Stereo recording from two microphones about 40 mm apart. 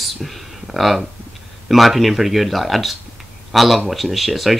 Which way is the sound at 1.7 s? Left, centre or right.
Centre.